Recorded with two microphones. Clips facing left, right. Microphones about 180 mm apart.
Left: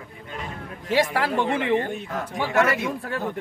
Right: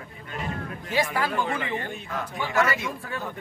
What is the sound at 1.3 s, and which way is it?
Speech, 30° left (ahead or behind).